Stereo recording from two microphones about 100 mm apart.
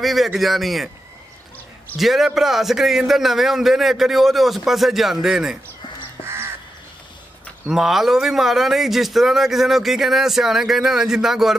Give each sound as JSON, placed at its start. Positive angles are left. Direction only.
{"t": 0.0, "sound": "speech", "side_deg": 0}
{"t": 2.0, "sound": "speech", "side_deg": 0}
{"t": 6.2, "sound": "crow", "side_deg": -25}
{"t": 7.7, "sound": "speech", "side_deg": -5}